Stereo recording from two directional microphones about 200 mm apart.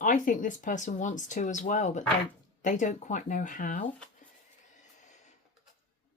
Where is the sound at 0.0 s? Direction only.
40° left (ahead or behind).